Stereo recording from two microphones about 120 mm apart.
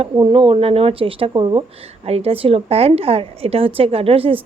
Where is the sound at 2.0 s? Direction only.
55° right (ahead or behind).